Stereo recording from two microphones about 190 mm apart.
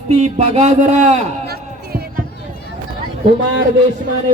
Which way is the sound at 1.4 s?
55° right (ahead or behind).